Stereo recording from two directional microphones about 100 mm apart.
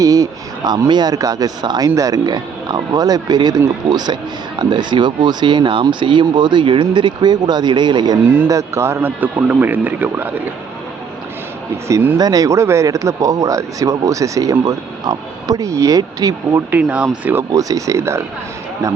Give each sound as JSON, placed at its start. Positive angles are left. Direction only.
{"t": 0.0, "sound": "speech", "side_deg": -35}
{"t": 8.4, "sound": "speech", "side_deg": -30}
{"t": 11.9, "sound": "speech", "side_deg": -30}
{"t": 16.7, "sound": "speech", "side_deg": -15}
{"t": 17.3, "sound": "speech", "side_deg": -35}